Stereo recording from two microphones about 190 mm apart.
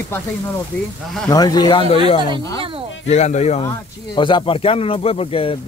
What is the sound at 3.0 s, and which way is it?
Speech, 35° left (ahead or behind).